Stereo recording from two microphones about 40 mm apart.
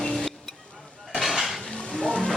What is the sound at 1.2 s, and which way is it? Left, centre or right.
Dishes, centre.